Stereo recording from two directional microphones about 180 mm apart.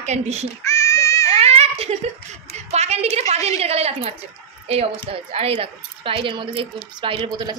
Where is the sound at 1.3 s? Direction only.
35° right (ahead or behind).